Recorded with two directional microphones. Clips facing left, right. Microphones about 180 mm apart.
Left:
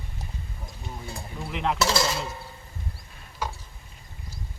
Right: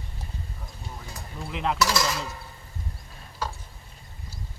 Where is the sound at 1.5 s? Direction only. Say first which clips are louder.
Left 1 dB; centre (ahead or behind).